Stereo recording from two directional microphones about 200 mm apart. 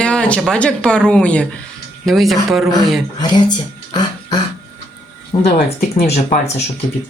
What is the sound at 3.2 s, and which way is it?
Speech, 20° left (ahead or behind).